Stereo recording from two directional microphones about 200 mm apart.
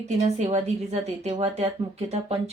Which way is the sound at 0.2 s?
35° right (ahead or behind).